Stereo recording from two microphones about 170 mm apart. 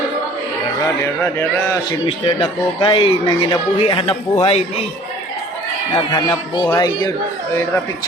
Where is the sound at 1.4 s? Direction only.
15° left (ahead or behind).